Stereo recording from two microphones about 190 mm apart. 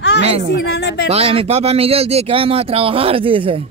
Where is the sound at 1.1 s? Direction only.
30° right (ahead or behind).